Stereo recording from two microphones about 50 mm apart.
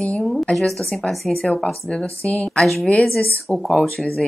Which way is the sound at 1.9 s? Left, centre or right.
Centre.